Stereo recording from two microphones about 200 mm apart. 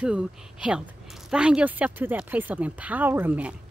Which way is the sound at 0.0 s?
5° right (ahead or behind).